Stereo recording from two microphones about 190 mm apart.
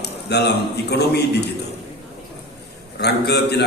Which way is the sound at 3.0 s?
60° left (ahead or behind).